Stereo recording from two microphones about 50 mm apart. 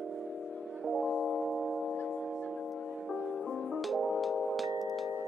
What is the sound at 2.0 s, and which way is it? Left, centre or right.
Music, centre.